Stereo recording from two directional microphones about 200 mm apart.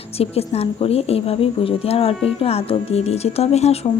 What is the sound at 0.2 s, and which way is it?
A woman's voice, 30° left (ahead or behind).